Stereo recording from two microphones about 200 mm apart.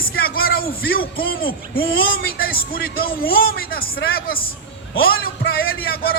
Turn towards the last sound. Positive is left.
turn(degrees=50)  # may be behind; listen again after turning